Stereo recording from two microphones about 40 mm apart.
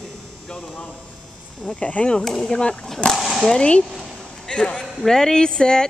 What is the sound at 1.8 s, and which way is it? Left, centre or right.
Speech, left.